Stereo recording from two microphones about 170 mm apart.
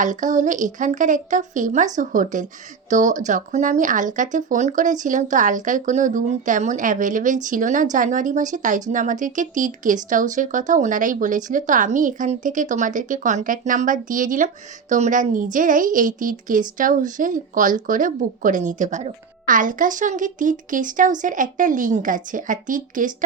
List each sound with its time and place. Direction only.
0.0 s speech: 45° right (ahead or behind)